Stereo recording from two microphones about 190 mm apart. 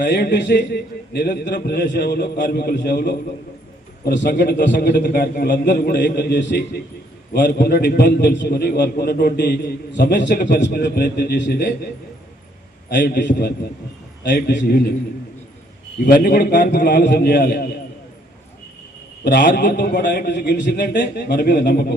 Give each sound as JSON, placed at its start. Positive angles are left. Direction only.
{"t": 0.0, "sound": "a man's voice", "side_deg": 65}
{"t": 4.0, "sound": "a man's voice", "side_deg": 70}
{"t": 4.3, "sound": "a man's voice", "side_deg": 45}
{"t": 7.3, "sound": "a man's voice", "side_deg": 50}
{"t": 12.9, "sound": "a man's voice", "side_deg": 65}
{"t": 16.0, "sound": "a man's voice", "side_deg": 50}
{"t": 19.2, "sound": "a man's voice", "side_deg": 60}